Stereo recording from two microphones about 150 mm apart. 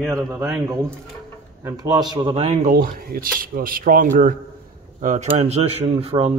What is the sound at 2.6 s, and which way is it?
Speech, 65° right (ahead or behind).